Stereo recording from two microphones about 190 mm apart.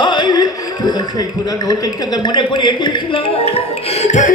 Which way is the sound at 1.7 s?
20° left (ahead or behind).